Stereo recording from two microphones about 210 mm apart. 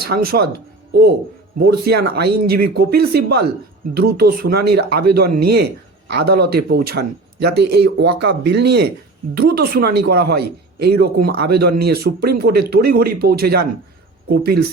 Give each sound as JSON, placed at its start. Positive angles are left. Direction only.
{"t": 0.0, "sound": "speech", "side_deg": -45}
{"t": 1.5, "sound": "speech", "side_deg": -45}